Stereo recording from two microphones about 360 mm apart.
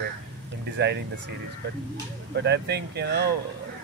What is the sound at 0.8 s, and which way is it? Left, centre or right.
Speech, right.